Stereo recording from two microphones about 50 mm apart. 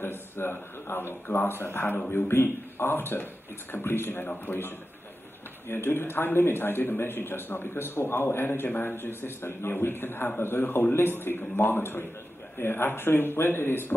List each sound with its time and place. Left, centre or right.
0.0 s a man's voice: left